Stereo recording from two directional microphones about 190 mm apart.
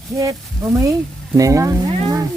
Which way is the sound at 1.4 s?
15° right (ahead or behind).